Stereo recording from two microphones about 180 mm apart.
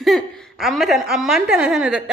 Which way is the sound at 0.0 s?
Centre (ahead or behind).